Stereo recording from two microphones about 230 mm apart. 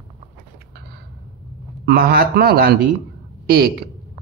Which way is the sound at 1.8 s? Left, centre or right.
Right.